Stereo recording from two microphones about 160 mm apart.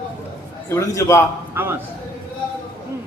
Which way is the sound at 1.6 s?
15° right (ahead or behind).